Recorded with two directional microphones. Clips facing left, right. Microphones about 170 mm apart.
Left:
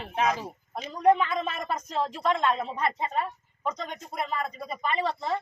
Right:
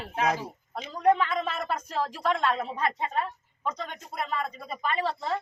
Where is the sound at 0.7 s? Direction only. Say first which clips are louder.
Left 2 dB; 15° left (ahead or behind).